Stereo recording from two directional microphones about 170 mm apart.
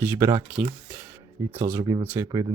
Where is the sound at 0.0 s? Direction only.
15° right (ahead or behind).